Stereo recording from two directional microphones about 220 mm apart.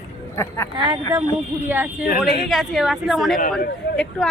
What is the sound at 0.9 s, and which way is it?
A woman's voice, 20° right (ahead or behind).